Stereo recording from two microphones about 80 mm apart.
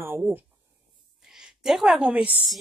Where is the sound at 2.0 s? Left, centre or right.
Centre.